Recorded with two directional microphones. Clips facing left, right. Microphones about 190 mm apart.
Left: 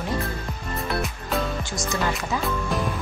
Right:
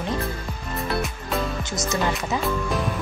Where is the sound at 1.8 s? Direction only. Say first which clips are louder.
Right 2 dB; 20° right (ahead or behind).